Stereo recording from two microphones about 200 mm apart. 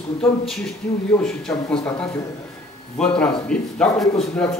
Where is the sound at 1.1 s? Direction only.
5° left (ahead or behind).